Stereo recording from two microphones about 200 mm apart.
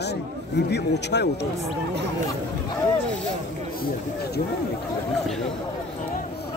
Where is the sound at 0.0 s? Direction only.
55° left (ahead or behind).